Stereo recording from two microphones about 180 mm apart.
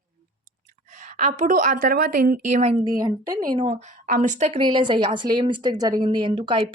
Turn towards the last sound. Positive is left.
turn(degrees=-25)  # may be behind; listen again after turning